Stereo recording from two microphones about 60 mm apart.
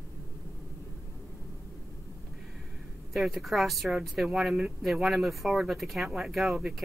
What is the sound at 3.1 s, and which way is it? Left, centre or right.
Speech, centre.